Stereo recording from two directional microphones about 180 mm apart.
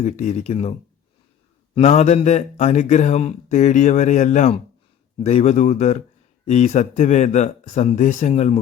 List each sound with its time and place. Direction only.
0.0 s speech: 40° left (ahead or behind)